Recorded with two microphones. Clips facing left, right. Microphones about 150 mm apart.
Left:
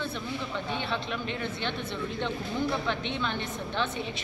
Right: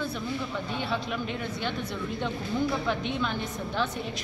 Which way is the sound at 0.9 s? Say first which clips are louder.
Right 2 dB; 5° right (ahead or behind).